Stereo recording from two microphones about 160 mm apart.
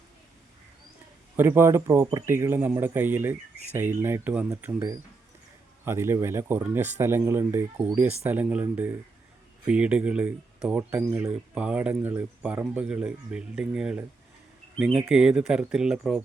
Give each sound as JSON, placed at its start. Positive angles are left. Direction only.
{"t": 1.4, "sound": "speech", "side_deg": -15}